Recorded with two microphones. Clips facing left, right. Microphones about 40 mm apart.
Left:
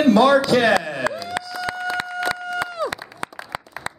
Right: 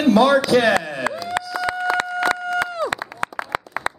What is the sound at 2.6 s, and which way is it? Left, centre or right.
Run, centre.